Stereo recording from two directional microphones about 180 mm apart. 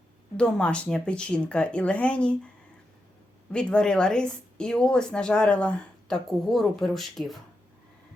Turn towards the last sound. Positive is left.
turn(degrees=0)  # may be behind; listen again after turning